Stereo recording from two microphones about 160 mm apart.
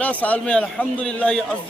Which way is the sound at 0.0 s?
10° left (ahead or behind).